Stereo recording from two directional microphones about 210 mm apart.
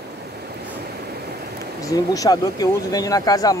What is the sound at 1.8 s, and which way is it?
Speech, 15° left (ahead or behind).